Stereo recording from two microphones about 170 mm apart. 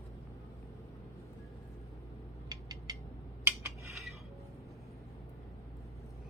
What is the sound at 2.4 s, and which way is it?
Mechanisms, 20° right (ahead or behind).